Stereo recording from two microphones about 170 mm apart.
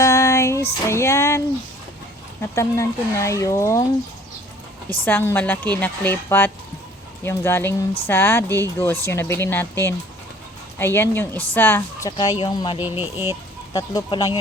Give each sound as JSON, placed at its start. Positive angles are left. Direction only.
{"t": 0.0, "sound": "music", "side_deg": 15}
{"t": 2.4, "sound": "a woman's voice", "side_deg": 15}
{"t": 4.9, "sound": "a woman's voice", "side_deg": 10}
{"t": 12.1, "sound": "speech", "side_deg": 25}
{"t": 12.8, "sound": "speech", "side_deg": -10}
{"t": 13.7, "sound": "speech", "side_deg": 20}